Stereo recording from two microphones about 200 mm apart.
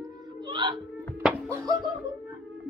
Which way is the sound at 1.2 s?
5° right (ahead or behind).